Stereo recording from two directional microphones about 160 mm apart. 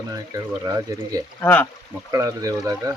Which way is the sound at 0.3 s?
20° right (ahead or behind).